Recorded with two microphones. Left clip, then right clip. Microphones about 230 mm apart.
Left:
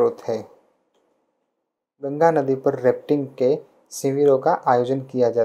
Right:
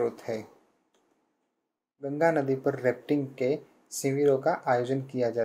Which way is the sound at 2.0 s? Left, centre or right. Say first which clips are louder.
Left 7 dB; centre.